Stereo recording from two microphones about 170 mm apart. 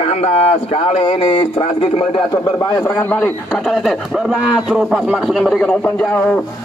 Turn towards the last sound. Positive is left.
turn(degrees=10)  # may be behind; listen again after turning